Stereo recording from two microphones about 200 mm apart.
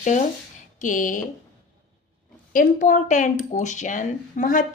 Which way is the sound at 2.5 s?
40° left (ahead or behind).